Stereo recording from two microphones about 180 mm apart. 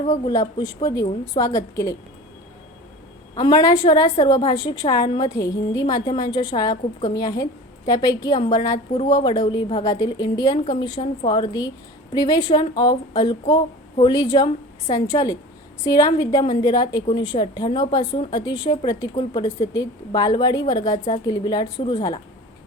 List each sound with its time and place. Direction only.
0.3 s a woman's voice: 20° left (ahead or behind)
3.3 s a woman's voice: 20° left (ahead or behind)